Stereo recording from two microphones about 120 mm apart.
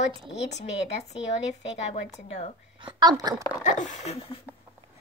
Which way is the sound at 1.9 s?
70° left (ahead or behind).